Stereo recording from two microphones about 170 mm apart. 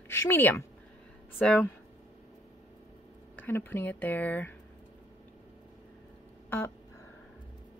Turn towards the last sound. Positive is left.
turn(degrees=15)  # may be behind; listen again after turning